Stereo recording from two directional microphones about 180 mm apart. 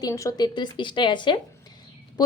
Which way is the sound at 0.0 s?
20° left (ahead or behind).